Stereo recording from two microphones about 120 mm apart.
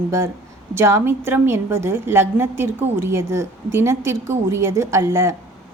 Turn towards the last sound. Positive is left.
turn(degrees=-25)  # may be behind; listen again after turning